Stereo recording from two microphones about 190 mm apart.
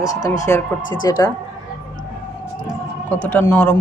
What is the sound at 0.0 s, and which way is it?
Speech, 20° left (ahead or behind).